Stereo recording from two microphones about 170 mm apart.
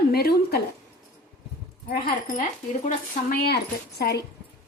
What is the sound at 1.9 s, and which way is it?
A woman's voice, 55° left (ahead or behind).